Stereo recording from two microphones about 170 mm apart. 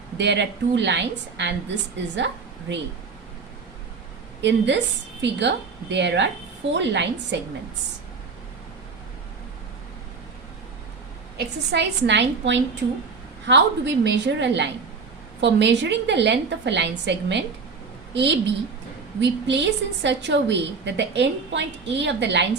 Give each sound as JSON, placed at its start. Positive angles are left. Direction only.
{"t": 0.2, "sound": "a woman's voice", "side_deg": -90}
{"t": 4.4, "sound": "a woman's voice", "side_deg": -90}
{"t": 11.3, "sound": "a woman's voice", "side_deg": -90}